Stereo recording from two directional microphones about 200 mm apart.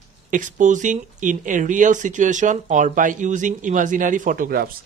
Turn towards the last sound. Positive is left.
turn(degrees=-45)  # may be behind; listen again after turning